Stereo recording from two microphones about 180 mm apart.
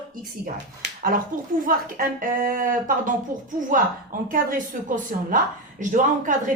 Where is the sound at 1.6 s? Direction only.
50° right (ahead or behind).